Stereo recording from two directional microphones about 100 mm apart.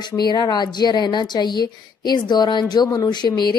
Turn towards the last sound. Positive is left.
turn(degrees=45)  # may be behind; listen again after turning